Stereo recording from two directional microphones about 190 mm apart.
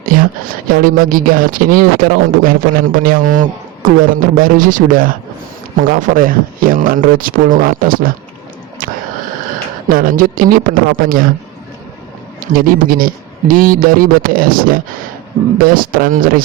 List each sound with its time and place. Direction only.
0.0 s speech: 45° right (ahead or behind)
8.8 s a sound: 45° right (ahead or behind)
9.9 s speech: 50° right (ahead or behind)
12.4 s speech: 45° right (ahead or behind)